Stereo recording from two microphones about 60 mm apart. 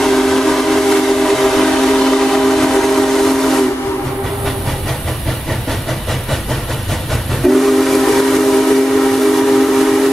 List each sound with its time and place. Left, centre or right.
0.0 s train: centre
7.4 s steam whistle: centre